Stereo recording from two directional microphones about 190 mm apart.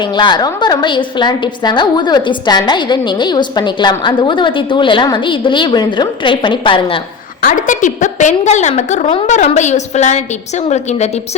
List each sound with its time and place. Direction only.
0.2 s a woman's voice: 20° left (ahead or behind)
7.4 s a woman's voice: 45° left (ahead or behind)